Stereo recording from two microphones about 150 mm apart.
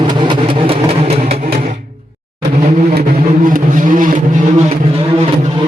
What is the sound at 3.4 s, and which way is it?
Vehicle, 60° right (ahead or behind).